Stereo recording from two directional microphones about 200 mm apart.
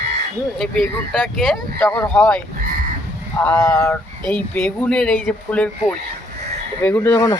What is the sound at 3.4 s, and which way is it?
A man's voice, 10° left (ahead or behind).